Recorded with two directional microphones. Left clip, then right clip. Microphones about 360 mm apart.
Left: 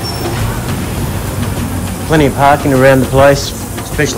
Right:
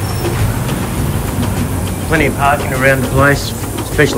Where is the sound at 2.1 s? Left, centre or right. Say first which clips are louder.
Left 4 dB; centre.